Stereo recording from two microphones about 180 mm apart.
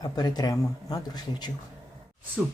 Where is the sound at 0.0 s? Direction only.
20° left (ahead or behind).